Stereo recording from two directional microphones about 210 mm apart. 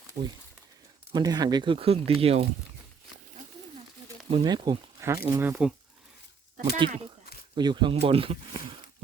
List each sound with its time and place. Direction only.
0.2 s speech: 30° right (ahead or behind)
4.3 s speech: 25° right (ahead or behind); by 5.7 s 5° right (ahead or behind)
6.6 s speech: 25° right (ahead or behind)